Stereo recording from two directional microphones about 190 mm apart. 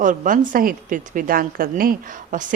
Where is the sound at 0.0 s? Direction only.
45° right (ahead or behind).